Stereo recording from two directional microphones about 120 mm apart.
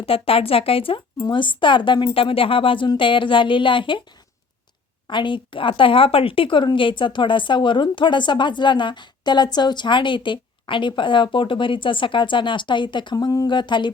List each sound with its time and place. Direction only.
0.0 s a woman's voice: 50° left (ahead or behind)
5.0 s a woman's voice: 40° left (ahead or behind)